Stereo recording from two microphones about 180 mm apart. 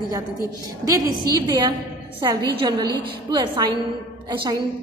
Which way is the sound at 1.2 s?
20° right (ahead or behind).